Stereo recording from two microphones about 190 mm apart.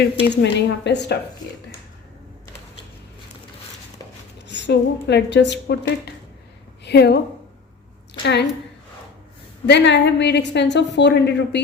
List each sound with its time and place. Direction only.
0.4 s a woman's voice: 60° left (ahead or behind)
4.4 s a woman's voice: 65° left (ahead or behind)
8.2 s a woman's voice: 60° left (ahead or behind)
9.6 s a woman's voice: 65° left (ahead or behind)